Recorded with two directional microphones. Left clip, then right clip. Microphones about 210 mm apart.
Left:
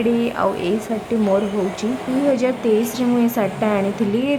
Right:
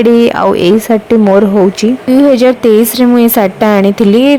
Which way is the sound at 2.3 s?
40° right (ahead or behind).